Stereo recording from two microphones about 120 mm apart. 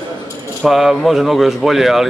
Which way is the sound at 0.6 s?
Centre (ahead or behind).